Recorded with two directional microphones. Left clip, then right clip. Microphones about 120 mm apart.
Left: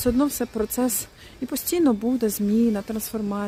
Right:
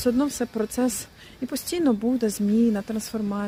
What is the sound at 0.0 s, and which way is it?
Speech, 30° left (ahead or behind).